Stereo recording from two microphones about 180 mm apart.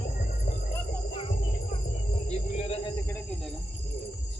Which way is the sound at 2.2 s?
35° left (ahead or behind).